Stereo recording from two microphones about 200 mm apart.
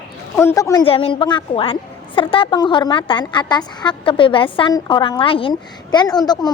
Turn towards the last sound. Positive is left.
turn(degrees=20)  # may be behind; listen again after turning